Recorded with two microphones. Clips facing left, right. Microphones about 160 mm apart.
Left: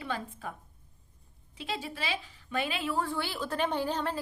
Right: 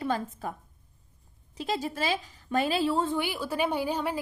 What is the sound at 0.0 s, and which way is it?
Speech, 40° right (ahead or behind).